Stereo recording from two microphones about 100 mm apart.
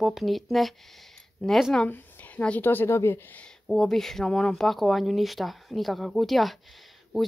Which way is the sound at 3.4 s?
5° left (ahead or behind).